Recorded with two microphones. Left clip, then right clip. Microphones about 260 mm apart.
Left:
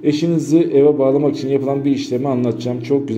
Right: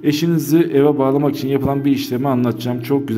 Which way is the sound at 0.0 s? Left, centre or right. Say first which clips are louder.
Left 1 dB; right.